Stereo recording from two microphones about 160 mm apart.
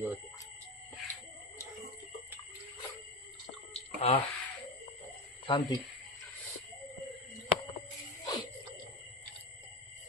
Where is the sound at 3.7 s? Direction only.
35° left (ahead or behind).